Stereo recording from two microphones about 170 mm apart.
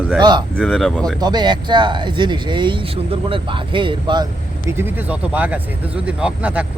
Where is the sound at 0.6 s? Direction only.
Centre (ahead or behind).